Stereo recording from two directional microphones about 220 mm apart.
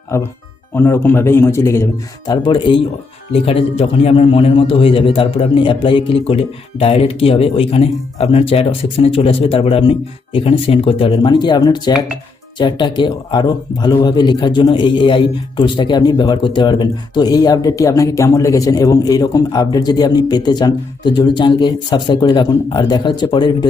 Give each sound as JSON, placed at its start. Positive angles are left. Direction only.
{"t": 0.1, "sound": "speech", "side_deg": 15}